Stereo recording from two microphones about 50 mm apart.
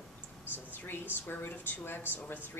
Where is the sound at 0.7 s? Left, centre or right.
Left.